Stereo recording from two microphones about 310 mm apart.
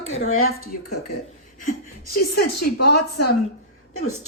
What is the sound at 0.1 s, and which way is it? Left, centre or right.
Speech, left.